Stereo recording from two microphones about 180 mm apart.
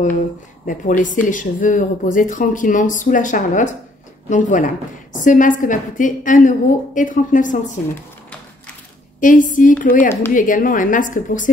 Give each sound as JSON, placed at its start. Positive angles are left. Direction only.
{"t": 0.7, "sound": "a woman's voice", "side_deg": 45}
{"t": 9.2, "sound": "a woman's voice", "side_deg": 45}